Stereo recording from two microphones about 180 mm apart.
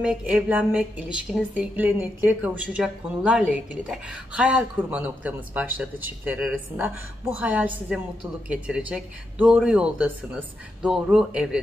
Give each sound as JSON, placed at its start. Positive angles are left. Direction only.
{"t": 0.0, "sound": "a woman's voice", "side_deg": -5}